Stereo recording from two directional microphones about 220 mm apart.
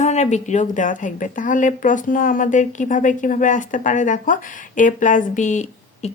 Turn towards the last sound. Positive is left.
turn(degrees=35)  # may be behind; listen again after turning